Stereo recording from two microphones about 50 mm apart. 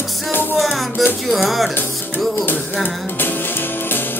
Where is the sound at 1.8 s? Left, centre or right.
Left.